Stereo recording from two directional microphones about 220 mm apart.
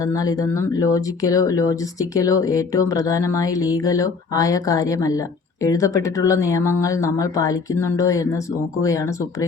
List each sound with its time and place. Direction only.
0.0 s speech: 15° left (ahead or behind)